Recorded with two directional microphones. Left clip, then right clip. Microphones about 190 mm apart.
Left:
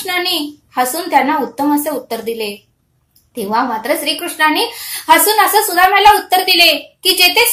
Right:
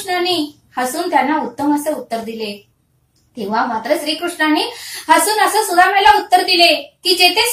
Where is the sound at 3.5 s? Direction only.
35° left (ahead or behind).